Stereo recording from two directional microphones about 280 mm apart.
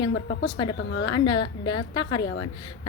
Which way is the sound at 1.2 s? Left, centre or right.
Centre.